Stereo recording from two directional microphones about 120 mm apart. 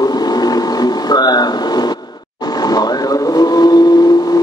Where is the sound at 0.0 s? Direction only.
35° left (ahead or behind).